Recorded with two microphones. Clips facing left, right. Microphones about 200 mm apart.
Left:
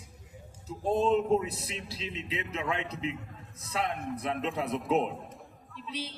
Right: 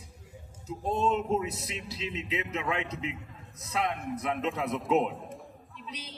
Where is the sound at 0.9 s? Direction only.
35° left (ahead or behind).